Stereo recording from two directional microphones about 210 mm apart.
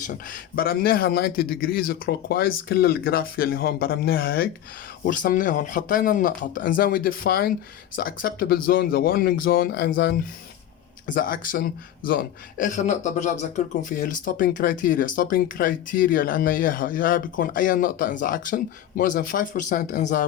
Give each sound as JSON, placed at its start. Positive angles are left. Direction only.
{"t": 0.0, "sound": "a man's voice", "side_deg": 40}